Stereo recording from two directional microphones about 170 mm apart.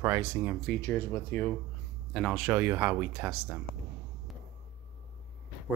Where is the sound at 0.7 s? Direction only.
15° left (ahead or behind).